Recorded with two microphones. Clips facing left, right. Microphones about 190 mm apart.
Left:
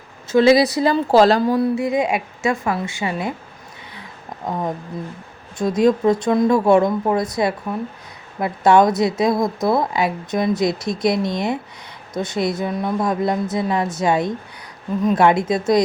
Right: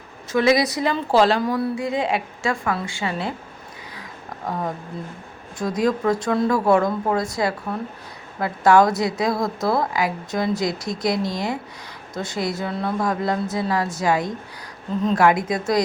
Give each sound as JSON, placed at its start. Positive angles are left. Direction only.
{"t": 0.3, "sound": "a woman's voice", "side_deg": 30}
{"t": 1.5, "sound": "a woman's voice", "side_deg": 25}
{"t": 5.5, "sound": "a woman's voice", "side_deg": 25}